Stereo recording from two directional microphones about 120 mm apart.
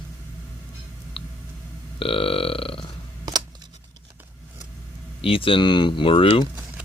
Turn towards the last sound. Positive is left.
turn(degrees=45)  # may be behind; listen again after turning